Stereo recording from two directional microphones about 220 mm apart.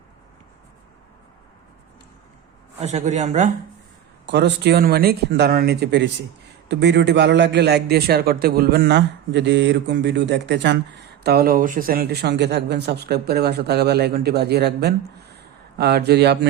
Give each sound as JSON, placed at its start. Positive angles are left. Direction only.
{"t": 2.8, "sound": "speech", "side_deg": -30}
{"t": 4.3, "sound": "a man's voice", "side_deg": -50}